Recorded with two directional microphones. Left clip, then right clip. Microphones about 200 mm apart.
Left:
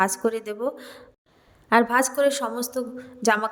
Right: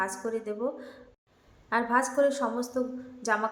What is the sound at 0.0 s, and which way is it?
A woman's voice, 45° left (ahead or behind).